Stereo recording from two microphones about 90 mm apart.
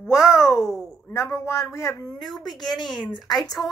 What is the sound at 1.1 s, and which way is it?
Speech, 30° left (ahead or behind).